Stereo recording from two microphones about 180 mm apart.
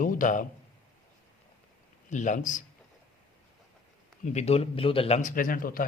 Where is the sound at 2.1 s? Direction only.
45° left (ahead or behind).